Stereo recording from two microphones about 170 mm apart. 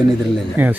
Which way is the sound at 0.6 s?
10° right (ahead or behind).